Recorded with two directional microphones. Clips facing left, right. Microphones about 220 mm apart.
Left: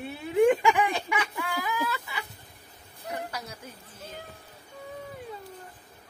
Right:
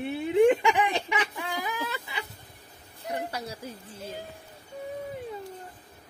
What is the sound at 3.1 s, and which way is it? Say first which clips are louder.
Speech: right 3 dB; 30° right (ahead or behind).